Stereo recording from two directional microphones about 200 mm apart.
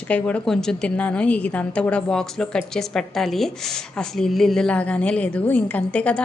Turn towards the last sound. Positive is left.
turn(degrees=5)  # may be behind; listen again after turning